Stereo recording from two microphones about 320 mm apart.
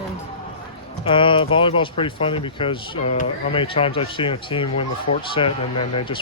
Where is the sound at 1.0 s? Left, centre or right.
Centre.